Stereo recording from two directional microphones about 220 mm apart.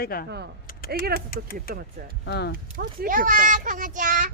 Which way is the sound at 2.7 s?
40° right (ahead or behind).